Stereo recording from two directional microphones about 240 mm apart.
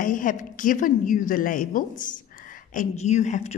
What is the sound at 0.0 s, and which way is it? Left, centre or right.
Speech, left.